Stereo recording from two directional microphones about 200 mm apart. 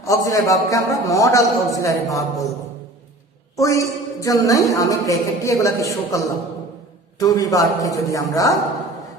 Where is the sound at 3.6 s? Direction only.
15° left (ahead or behind).